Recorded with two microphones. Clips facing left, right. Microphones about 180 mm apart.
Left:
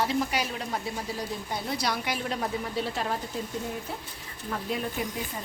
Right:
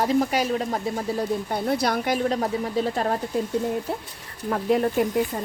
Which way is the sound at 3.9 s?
60° right (ahead or behind).